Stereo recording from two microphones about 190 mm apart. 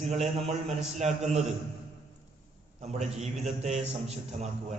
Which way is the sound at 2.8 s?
35° right (ahead or behind).